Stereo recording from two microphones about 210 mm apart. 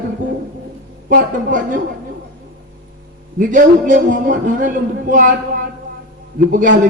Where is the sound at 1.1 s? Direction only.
40° right (ahead or behind).